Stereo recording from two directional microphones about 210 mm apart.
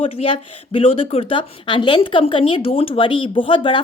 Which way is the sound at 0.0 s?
25° left (ahead or behind).